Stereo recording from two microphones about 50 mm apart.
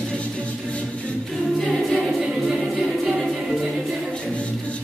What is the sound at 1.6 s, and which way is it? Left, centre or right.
Choir, centre.